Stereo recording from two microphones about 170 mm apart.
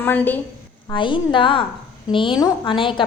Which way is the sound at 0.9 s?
30° left (ahead or behind).